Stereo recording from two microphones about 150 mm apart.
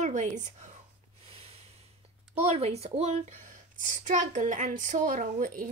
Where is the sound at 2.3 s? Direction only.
45° right (ahead or behind).